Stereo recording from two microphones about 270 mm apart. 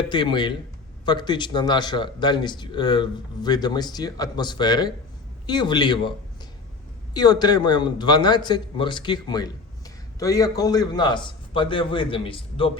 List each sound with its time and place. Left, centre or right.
0.1 s speech: centre